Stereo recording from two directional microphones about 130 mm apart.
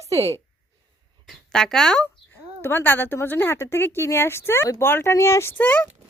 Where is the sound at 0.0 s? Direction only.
25° right (ahead or behind).